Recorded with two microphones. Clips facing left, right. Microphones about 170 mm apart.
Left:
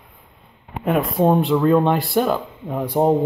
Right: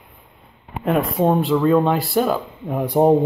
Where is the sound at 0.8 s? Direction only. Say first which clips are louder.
Even; centre (ahead or behind).